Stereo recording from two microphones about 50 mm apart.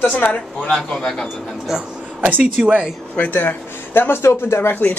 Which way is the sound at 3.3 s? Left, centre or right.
Left.